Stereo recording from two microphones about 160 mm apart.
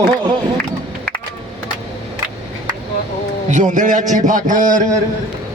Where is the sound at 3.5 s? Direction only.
50° right (ahead or behind).